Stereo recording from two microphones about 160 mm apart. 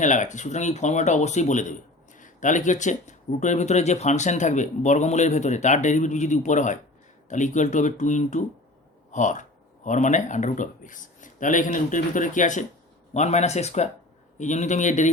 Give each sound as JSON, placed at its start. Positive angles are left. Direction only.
{"t": 0.0, "sound": "speech", "side_deg": 50}